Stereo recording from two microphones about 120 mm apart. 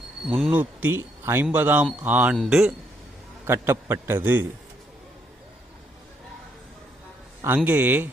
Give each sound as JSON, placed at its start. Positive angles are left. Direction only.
{"t": 0.3, "sound": "speech", "side_deg": 0}
{"t": 0.5, "sound": "speech", "side_deg": -15}
{"t": 2.3, "sound": "a man's voice", "side_deg": -5}
{"t": 3.4, "sound": "a man's voice", "side_deg": -20}
{"t": 7.4, "sound": "speech", "side_deg": -15}